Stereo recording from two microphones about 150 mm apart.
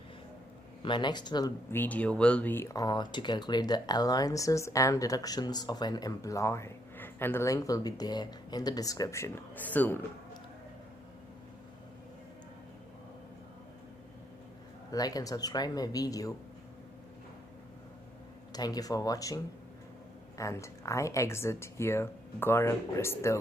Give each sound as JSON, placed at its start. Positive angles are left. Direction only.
{"t": 0.8, "sound": "speech", "side_deg": 30}
{"t": 1.7, "sound": "speech", "side_deg": 10}
{"t": 14.9, "sound": "speech", "side_deg": 25}
{"t": 18.5, "sound": "speech", "side_deg": 25}